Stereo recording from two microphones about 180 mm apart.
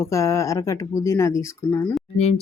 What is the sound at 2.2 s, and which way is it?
Speech, 35° left (ahead or behind).